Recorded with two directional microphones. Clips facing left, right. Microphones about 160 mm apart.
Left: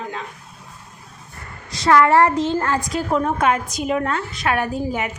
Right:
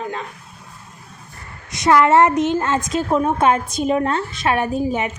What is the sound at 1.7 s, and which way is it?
A woman's voice, 20° right (ahead or behind).